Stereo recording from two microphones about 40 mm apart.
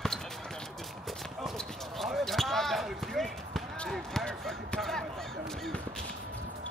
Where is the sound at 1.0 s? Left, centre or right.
Centre.